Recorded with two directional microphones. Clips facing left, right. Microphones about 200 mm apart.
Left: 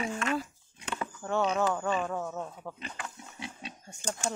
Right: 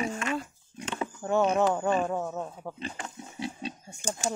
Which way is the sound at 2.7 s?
30° right (ahead or behind).